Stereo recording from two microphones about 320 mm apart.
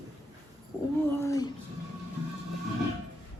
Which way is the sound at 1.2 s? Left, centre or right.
Centre.